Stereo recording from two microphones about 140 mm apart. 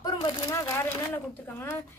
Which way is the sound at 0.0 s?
30° left (ahead or behind).